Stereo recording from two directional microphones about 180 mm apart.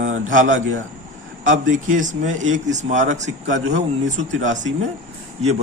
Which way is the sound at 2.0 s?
45° right (ahead or behind).